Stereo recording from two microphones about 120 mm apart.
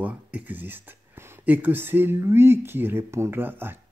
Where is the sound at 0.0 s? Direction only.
10° right (ahead or behind).